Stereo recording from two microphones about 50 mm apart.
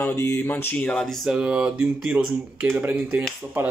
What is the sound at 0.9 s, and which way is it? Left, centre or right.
Speech, centre.